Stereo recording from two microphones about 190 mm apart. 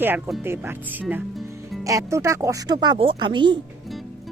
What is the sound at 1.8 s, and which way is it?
A woman's voice, 15° right (ahead or behind).